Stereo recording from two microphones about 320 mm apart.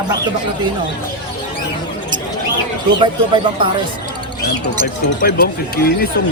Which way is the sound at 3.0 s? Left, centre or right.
Centre.